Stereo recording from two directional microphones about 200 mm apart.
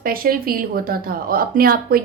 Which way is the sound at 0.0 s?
45° right (ahead or behind).